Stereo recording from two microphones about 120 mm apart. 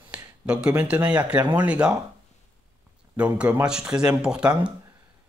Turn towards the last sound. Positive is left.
turn(degrees=-10)  # may be behind; listen again after turning